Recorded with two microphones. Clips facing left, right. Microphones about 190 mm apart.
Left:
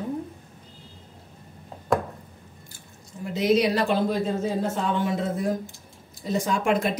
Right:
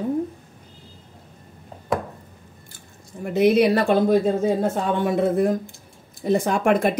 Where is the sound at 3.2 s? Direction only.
60° right (ahead or behind).